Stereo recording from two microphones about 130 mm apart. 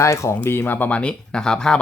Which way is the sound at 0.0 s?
20° left (ahead or behind).